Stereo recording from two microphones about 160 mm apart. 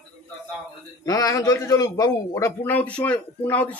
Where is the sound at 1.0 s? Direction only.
20° left (ahead or behind).